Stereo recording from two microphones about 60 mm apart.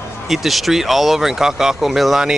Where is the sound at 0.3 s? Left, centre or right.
Centre.